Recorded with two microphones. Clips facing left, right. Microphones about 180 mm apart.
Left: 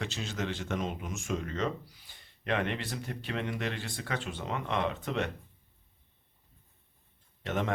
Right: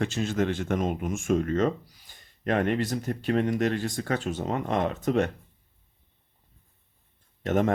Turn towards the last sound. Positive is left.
turn(degrees=-45)  # may be behind; listen again after turning